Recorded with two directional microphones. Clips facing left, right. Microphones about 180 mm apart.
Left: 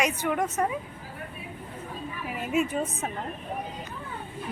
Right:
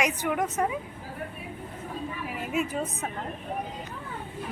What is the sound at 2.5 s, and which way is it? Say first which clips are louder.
Speech: left 3 dB; centre (ahead or behind).